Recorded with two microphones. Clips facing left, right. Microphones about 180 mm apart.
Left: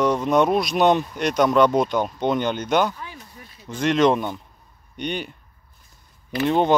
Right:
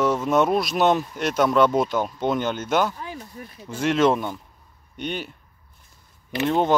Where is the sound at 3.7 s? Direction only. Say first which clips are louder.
Left 1 dB; 5° right (ahead or behind).